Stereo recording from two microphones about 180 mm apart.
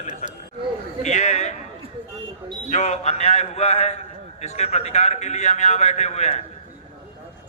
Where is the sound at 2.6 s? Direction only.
40° left (ahead or behind).